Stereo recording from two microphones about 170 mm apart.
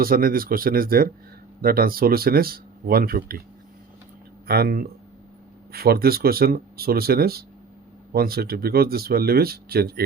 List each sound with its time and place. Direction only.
0.0 s speech: 60° right (ahead or behind)
4.4 s speech: 65° right (ahead or behind)